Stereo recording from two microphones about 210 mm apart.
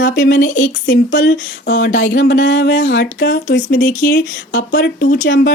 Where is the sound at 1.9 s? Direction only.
40° left (ahead or behind).